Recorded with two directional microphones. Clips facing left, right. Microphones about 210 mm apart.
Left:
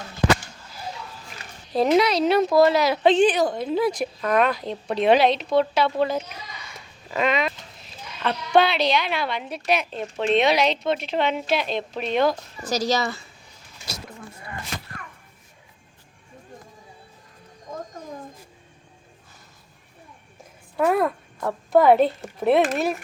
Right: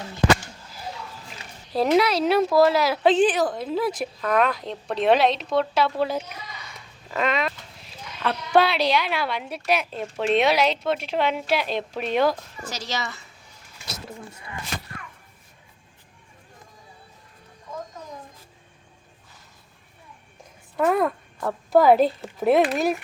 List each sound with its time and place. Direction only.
1.7 s a woman's voice: 5° right (ahead or behind)
12.6 s speech: 40° left (ahead or behind)
20.7 s a woman's voice: centre (ahead or behind)